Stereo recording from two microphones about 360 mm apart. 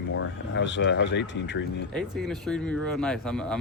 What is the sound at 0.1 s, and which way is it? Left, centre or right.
Speech, left.